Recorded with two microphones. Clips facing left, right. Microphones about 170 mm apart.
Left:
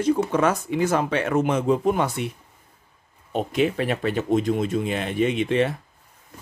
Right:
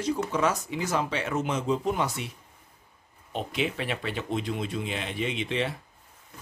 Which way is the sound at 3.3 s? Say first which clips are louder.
Left 8 dB; 45° left (ahead or behind).